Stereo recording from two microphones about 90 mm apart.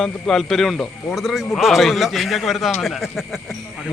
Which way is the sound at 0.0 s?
5° left (ahead or behind).